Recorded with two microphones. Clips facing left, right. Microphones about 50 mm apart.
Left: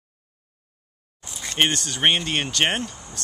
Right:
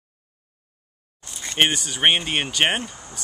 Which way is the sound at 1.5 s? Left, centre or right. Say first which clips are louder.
Right 1 dB; centre.